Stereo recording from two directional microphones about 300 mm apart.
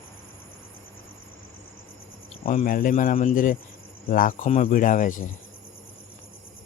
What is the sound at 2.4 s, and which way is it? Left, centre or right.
Speech, left.